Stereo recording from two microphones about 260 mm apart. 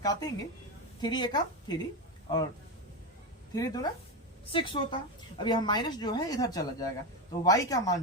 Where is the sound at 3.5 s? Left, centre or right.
Centre.